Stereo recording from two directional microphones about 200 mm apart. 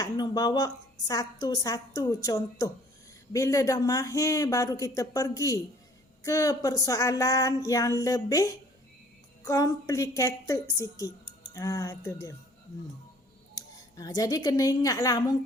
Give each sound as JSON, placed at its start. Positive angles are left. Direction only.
{"t": 0.0, "sound": "a woman's voice", "side_deg": 20}
{"t": 3.3, "sound": "a sound", "side_deg": 15}
{"t": 13.6, "sound": "speech", "side_deg": 20}